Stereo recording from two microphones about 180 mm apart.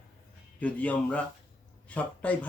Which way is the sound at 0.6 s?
10° left (ahead or behind).